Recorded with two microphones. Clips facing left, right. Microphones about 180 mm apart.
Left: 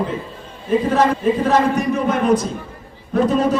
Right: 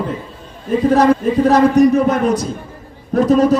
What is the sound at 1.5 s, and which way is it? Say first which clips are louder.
Speech: right 6 dB; 40° right (ahead or behind).